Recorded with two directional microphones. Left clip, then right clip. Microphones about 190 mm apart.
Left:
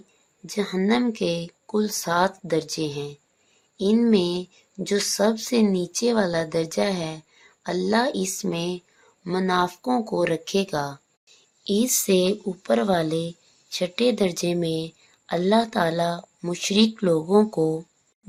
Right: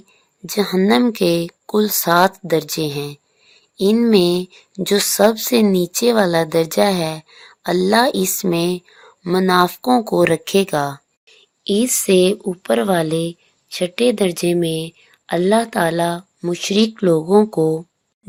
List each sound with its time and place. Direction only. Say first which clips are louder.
0.4 s speech: right 8 dB; 45° right (ahead or behind)
11.3 s a child's voice: right 6 dB; 25° right (ahead or behind)